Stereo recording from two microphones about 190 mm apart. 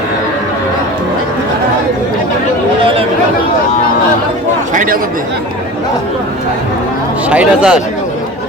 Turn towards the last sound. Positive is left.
turn(degrees=-5)  # may be behind; listen again after turning